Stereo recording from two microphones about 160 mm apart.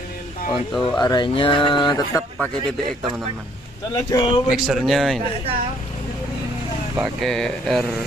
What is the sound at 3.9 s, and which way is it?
Speech, 25° left (ahead or behind).